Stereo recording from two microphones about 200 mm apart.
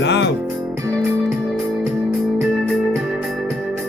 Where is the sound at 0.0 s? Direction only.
60° left (ahead or behind).